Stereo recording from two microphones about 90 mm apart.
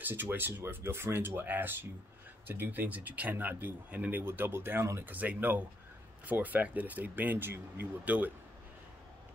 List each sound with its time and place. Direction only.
0.0 s speech: 25° right (ahead or behind)